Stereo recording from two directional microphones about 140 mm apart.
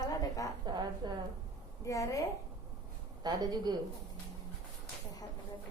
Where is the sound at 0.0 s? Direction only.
25° left (ahead or behind).